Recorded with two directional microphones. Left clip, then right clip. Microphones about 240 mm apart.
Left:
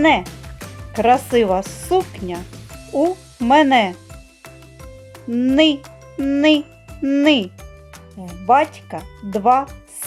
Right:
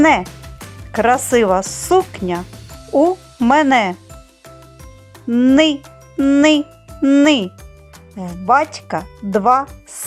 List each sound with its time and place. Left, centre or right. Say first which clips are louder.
0.9 s speech: right 1 dB; right
5.3 s speech: right 2 dB; centre